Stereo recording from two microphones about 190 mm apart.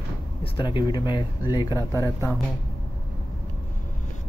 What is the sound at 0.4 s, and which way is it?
Speech, 25° left (ahead or behind).